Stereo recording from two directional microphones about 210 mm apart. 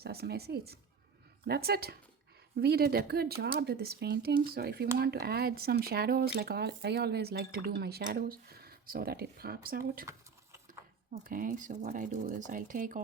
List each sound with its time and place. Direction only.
0.0 s speech: 50° right (ahead or behind)
11.1 s speech: 40° right (ahead or behind)